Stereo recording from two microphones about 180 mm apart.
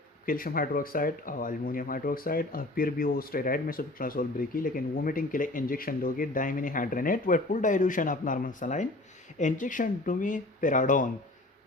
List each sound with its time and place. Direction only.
0.3 s speech: 50° left (ahead or behind)